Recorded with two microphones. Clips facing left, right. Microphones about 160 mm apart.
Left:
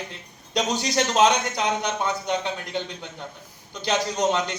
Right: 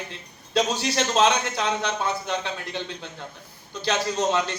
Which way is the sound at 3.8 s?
15° left (ahead or behind).